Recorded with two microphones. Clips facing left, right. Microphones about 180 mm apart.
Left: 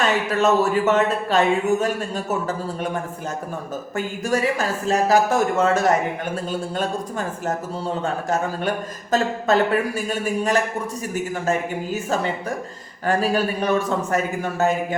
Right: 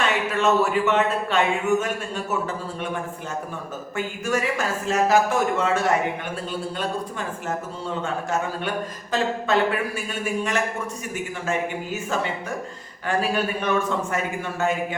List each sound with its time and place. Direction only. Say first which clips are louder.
0.0 s speech: left 3 dB; 40° left (ahead or behind)
13.1 s speech: left 3 dB; 40° left (ahead or behind)